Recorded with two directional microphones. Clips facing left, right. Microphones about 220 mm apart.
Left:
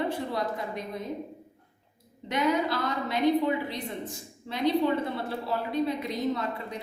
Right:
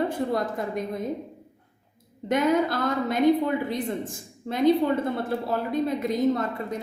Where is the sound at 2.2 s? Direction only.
50° right (ahead or behind).